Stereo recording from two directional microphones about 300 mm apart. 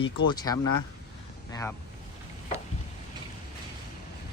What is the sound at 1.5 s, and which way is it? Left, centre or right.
Speech, centre.